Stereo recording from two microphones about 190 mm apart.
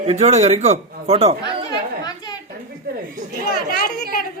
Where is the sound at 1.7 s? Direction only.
20° left (ahead or behind).